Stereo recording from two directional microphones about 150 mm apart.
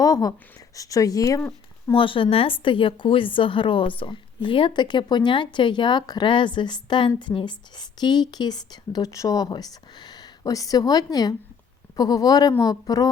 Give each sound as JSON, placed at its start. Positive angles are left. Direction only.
{"t": 0.0, "sound": "speech", "side_deg": 25}
{"t": 1.9, "sound": "a woman's voice", "side_deg": 35}